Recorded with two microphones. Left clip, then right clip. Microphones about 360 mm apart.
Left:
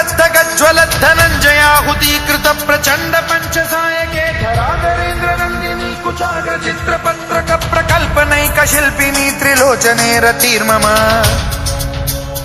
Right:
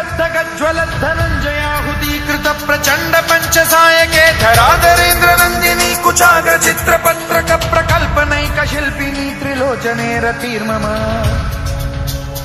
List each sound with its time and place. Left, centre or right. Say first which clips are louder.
0.2 s music: left 6 dB; left
2.2 s music: right 1 dB; centre; by 5.9 s right
6.3 s music: right 6 dB; right
7.1 s music: right 2 dB; centre
8.2 s music: left 3 dB; centre
9.5 s music: left 6 dB; left